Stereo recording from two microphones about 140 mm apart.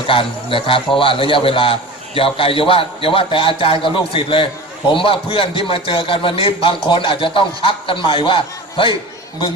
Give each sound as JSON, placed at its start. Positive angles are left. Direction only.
{"t": 0.1, "sound": "a man's voice", "side_deg": 40}